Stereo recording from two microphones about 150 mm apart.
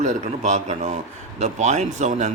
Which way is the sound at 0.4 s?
50° right (ahead or behind).